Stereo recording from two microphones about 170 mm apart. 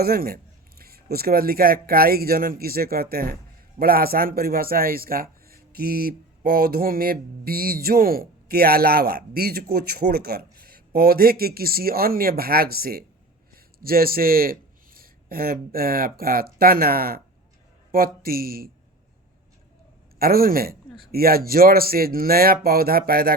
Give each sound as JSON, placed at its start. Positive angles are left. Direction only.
{"t": 0.0, "sound": "a man's voice", "side_deg": -60}
{"t": 20.1, "sound": "a man's voice", "side_deg": -60}